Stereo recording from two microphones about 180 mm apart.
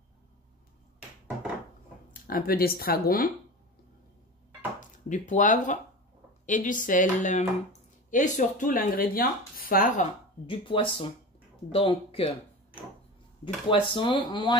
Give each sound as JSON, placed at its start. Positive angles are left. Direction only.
{"t": 2.2, "sound": "speech", "side_deg": 55}
{"t": 4.7, "sound": "speech", "side_deg": 45}
{"t": 10.4, "sound": "speech", "side_deg": 30}
{"t": 13.7, "sound": "speech", "side_deg": 25}